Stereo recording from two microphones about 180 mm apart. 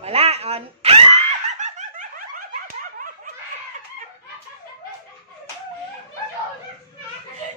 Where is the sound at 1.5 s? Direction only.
40° right (ahead or behind).